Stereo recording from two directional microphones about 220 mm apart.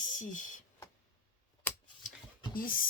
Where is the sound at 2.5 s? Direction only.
40° left (ahead or behind).